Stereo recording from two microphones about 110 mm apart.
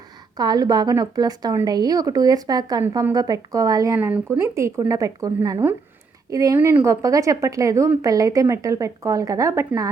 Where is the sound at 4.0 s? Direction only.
15° right (ahead or behind).